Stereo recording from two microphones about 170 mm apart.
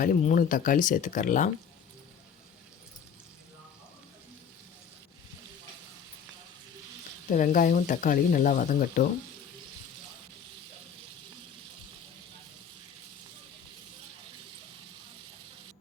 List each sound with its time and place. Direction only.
0.0 s speech: 55° left (ahead or behind)
7.3 s speech: 50° left (ahead or behind)